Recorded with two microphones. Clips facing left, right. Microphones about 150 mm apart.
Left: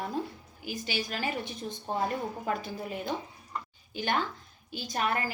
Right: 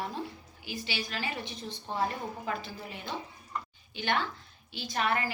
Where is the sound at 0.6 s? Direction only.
45° left (ahead or behind).